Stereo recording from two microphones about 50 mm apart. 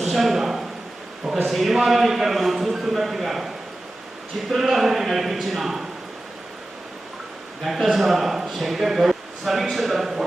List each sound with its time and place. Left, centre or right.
0.0 s a sound: centre
1.3 s speech: centre
7.6 s speech: centre